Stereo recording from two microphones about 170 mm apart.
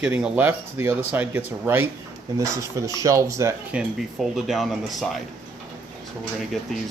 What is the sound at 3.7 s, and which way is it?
Speech, centre (ahead or behind).